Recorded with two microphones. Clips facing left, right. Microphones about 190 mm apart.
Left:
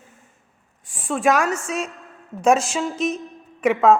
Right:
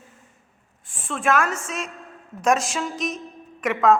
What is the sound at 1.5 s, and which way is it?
Speech, 35° left (ahead or behind).